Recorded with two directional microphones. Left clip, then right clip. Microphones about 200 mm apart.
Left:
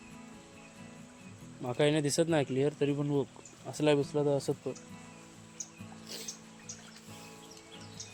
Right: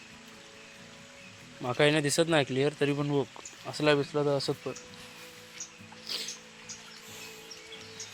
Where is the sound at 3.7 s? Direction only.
15° left (ahead or behind).